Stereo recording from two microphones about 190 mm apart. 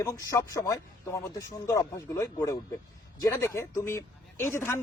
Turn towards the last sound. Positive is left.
turn(degrees=10)  # may be behind; listen again after turning